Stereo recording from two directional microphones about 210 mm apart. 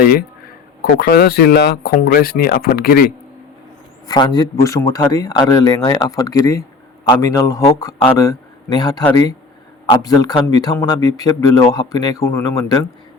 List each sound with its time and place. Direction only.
0.0 s speech: 45° left (ahead or behind)
4.1 s speech: 20° left (ahead or behind)